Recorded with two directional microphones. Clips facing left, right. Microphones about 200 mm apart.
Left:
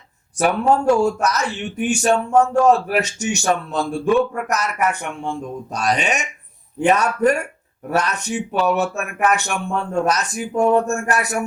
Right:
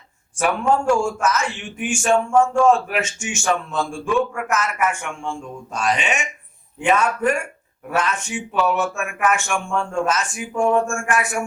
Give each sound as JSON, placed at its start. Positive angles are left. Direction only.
{"t": 0.3, "sound": "speech", "side_deg": 40}